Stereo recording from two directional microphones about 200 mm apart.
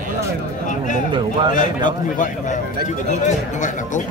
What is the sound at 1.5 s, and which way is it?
Speech, 40° left (ahead or behind).